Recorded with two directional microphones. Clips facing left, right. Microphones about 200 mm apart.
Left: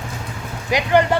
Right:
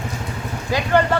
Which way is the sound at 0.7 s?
15° left (ahead or behind).